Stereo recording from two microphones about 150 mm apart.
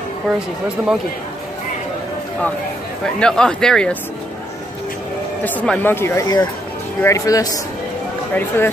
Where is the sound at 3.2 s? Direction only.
5° left (ahead or behind).